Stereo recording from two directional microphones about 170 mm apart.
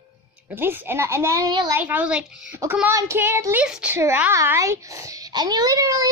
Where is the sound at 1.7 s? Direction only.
10° right (ahead or behind).